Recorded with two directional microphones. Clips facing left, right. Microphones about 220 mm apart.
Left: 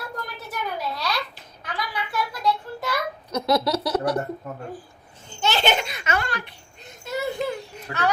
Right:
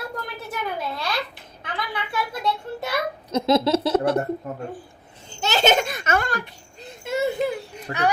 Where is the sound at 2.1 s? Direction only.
25° right (ahead or behind).